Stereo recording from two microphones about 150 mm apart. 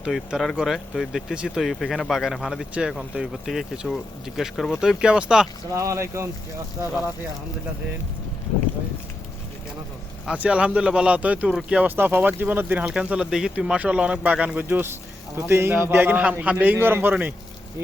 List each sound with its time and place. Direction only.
0.0 s speech: 5° right (ahead or behind)
5.7 s speech: 20° right (ahead or behind)
10.2 s speech: 10° right (ahead or behind)